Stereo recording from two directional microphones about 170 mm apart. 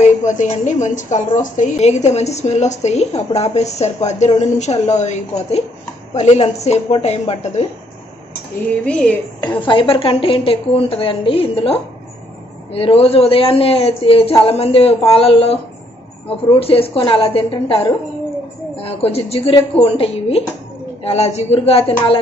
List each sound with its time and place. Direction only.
0.0 s a woman's voice: 45° left (ahead or behind)
8.8 s speech: 5° left (ahead or behind)
9.6 s a woman's voice: 30° left (ahead or behind)